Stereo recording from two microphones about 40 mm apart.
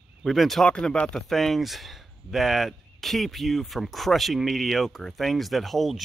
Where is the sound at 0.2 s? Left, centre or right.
Centre.